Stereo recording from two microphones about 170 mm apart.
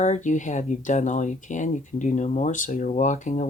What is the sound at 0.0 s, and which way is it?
Speech, 45° left (ahead or behind).